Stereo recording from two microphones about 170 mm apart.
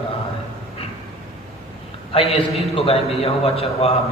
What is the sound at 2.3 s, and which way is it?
A man's voice, 35° left (ahead or behind).